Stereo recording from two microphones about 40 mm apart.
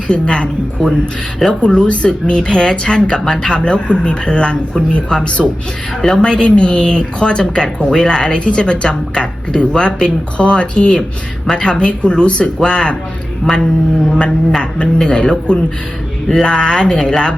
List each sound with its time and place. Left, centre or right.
0.1 s speech: left
13.4 s mantra: centre
14.1 s speech: centre